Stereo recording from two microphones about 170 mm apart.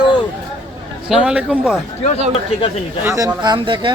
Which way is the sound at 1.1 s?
5° right (ahead or behind).